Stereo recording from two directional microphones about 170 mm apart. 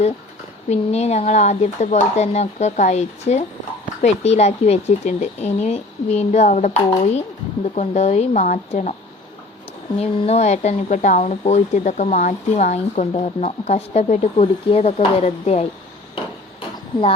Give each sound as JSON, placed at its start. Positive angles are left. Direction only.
{"t": 0.7, "sound": "speech", "side_deg": 40}
{"t": 10.0, "sound": "speech", "side_deg": 35}
{"t": 16.1, "sound": "a sound", "side_deg": 30}